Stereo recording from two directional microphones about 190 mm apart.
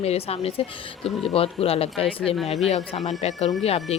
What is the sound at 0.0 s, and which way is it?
Speech, 30° left (ahead or behind).